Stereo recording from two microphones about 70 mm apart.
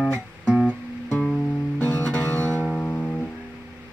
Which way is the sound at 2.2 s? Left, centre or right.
Left.